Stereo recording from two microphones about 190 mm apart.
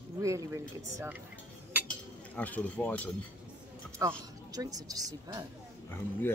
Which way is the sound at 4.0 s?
20° right (ahead or behind).